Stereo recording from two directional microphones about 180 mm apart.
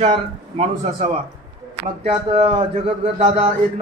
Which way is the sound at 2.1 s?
25° right (ahead or behind).